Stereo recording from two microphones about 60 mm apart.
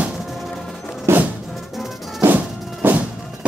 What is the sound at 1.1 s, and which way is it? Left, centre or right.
Music, right.